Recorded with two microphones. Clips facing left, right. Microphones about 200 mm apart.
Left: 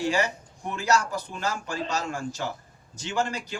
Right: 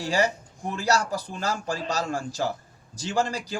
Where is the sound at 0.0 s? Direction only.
35° right (ahead or behind).